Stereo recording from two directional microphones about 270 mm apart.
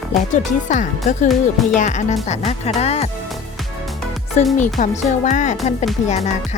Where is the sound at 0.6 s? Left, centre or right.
Left.